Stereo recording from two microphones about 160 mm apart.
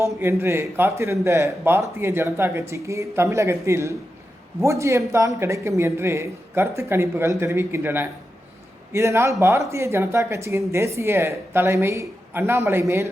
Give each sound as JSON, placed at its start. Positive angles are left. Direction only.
{"t": 0.0, "sound": "a man's voice", "side_deg": -15}